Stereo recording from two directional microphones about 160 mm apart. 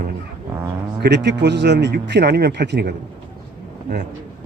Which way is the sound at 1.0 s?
90° right.